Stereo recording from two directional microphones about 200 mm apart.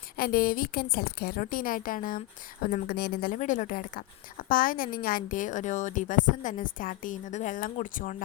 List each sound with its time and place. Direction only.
0.2 s a woman's voice: 45° left (ahead or behind)